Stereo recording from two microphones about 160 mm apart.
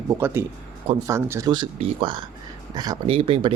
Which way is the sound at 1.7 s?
35° right (ahead or behind).